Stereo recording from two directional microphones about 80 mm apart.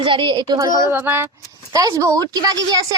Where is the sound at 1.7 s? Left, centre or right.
Right.